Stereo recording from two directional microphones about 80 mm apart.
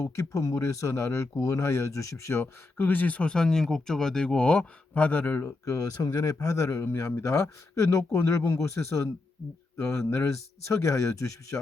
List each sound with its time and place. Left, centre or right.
0.0 s speech: left
5.6 s a man's voice: left